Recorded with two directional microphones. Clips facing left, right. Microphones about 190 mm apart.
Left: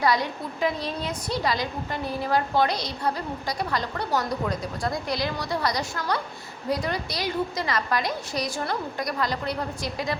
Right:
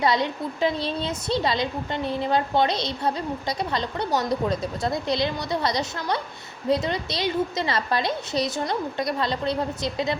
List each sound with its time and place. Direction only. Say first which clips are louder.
0.0 s a woman's voice: right 1 dB; 25° right (ahead or behind)